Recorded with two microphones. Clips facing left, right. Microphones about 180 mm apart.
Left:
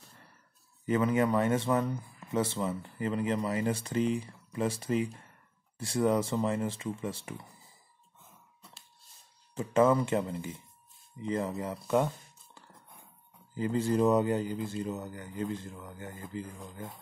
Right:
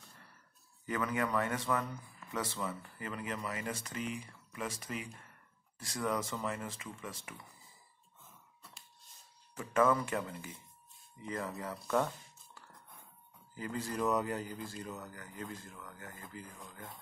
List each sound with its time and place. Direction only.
0.8 s speech: 25° left (ahead or behind)
9.6 s speech: 25° left (ahead or behind)
13.6 s speech: 25° left (ahead or behind)